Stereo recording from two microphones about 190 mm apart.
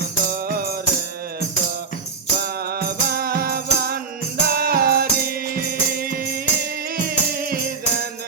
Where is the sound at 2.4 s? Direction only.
55° right (ahead or behind).